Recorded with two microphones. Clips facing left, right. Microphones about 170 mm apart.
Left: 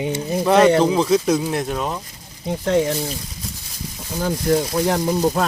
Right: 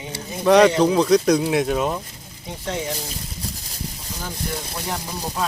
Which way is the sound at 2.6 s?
55° left (ahead or behind).